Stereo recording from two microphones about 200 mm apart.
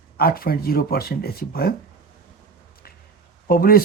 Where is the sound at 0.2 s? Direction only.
50° left (ahead or behind).